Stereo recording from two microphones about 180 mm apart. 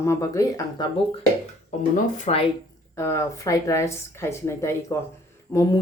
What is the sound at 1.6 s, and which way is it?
Speech, 40° left (ahead or behind).